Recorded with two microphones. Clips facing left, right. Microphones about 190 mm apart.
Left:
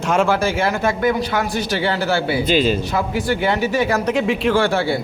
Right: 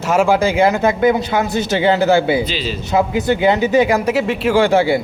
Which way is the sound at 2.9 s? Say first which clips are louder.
Right 5 dB; 20° right (ahead or behind).